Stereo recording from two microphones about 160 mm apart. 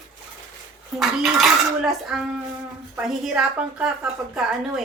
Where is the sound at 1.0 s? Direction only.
Centre (ahead or behind).